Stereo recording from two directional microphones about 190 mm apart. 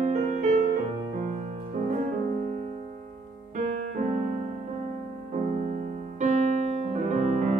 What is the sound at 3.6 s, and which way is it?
Music, 40° right (ahead or behind).